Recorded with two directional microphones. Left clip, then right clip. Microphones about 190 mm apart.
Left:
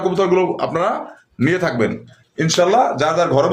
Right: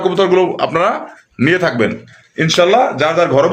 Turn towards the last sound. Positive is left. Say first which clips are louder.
# right 4 dB
turn(degrees=-25)  # may be behind; listen again after turning